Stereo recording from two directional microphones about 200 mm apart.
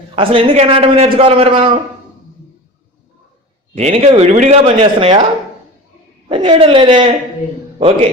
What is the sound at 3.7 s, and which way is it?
Speech, 30° right (ahead or behind).